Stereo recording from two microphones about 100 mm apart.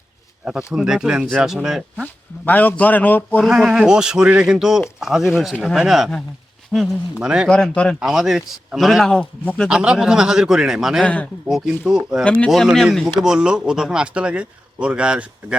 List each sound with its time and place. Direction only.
0.4 s speech: 10° right (ahead or behind)
2.5 s a man's voice: 15° left (ahead or behind)
3.4 s a man's voice: 5° right (ahead or behind)
7.5 s a man's voice: 10° left (ahead or behind)
8.0 s a man's voice: 5° right (ahead or behind)
9.6 s speech: 10° right (ahead or behind)
11.0 s a man's voice: 15° left (ahead or behind)
11.4 s a man's voice: 5° right (ahead or behind)
12.2 s a man's voice: 10° left (ahead or behind)
12.5 s speech: centre (ahead or behind)